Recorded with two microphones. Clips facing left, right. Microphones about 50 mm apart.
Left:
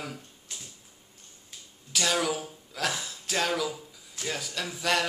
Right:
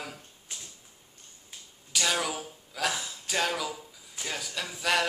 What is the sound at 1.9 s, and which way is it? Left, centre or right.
A man's voice, centre.